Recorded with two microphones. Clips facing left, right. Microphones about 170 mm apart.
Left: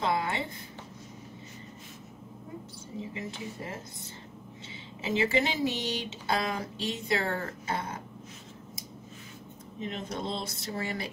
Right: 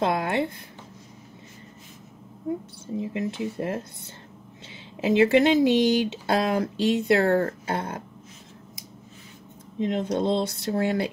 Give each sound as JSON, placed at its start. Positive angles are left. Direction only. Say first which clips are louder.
{"t": 0.0, "sound": "a sound", "louder": "right 6 dB", "side_deg": -65}
{"t": 3.0, "sound": "speech", "louder": "right 9 dB", "side_deg": -65}
{"t": 5.0, "sound": "speech", "louder": "right 9 dB", "side_deg": -65}
{"t": 9.8, "sound": "speech", "louder": "right 11 dB", "side_deg": -70}